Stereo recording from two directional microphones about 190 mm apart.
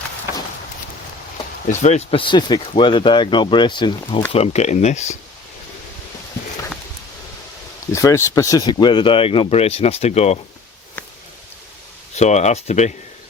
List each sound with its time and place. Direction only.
1.8 s speech: 35° left (ahead or behind)
7.9 s speech: 15° left (ahead or behind); by 10.4 s 35° left (ahead or behind)
12.1 s speech: 35° left (ahead or behind)